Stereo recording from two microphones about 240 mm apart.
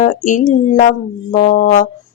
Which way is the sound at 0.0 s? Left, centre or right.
Left.